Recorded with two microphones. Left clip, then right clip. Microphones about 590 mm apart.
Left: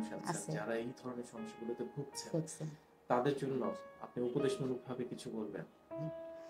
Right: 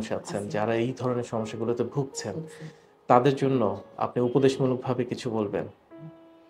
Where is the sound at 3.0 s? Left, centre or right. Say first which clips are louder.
Right 14 dB; right.